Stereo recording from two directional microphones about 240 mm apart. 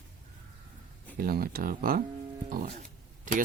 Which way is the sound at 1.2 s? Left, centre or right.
Right.